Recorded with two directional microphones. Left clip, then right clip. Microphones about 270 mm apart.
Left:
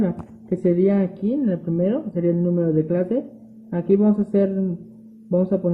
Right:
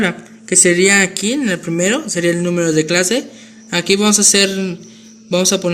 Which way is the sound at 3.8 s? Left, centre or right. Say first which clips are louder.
Right 5 dB; right.